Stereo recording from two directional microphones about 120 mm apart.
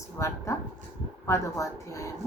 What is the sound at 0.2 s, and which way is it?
Speech, 25° left (ahead or behind).